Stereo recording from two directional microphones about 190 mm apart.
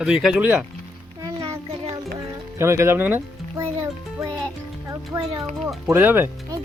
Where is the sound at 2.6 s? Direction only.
15° right (ahead or behind).